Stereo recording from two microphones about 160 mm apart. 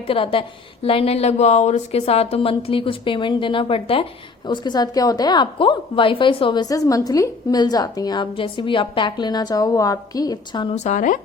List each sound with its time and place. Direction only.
0.1 s a woman's voice: 35° left (ahead or behind)
10.8 s speech: 50° left (ahead or behind)